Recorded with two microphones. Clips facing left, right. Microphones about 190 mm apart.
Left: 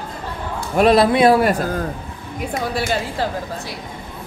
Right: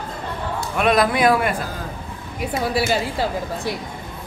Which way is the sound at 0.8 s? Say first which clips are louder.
Left 5 dB; 30° left (ahead or behind).